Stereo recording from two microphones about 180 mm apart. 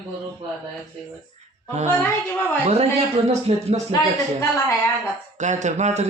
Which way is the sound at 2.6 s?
35° right (ahead or behind).